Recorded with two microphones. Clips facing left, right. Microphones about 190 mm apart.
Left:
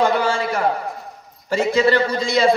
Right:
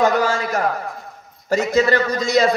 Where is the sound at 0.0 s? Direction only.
40° right (ahead or behind).